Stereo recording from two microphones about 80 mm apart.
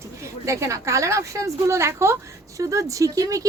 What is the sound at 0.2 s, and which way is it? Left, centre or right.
Speech, right.